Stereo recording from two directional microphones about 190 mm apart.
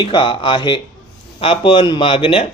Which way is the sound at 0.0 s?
25° left (ahead or behind).